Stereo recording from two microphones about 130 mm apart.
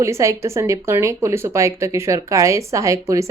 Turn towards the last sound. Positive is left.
turn(degrees=-25)  # may be behind; listen again after turning